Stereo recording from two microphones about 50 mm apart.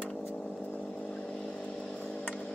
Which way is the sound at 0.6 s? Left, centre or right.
Left.